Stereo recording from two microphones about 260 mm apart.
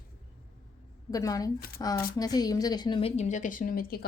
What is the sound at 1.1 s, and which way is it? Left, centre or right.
Speech, centre.